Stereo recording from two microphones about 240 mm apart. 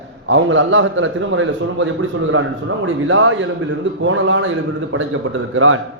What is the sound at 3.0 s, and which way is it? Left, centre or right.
A man's voice, right.